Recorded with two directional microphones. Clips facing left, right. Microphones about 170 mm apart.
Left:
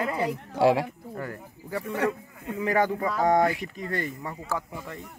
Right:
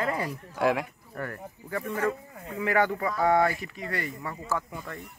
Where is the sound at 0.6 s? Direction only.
30° left (ahead or behind).